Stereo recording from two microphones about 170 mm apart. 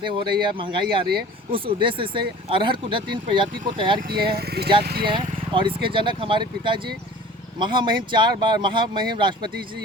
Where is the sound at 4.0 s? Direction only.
60° right (ahead or behind).